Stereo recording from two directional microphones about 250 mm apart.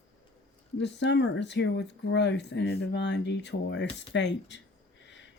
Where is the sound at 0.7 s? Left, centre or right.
Left.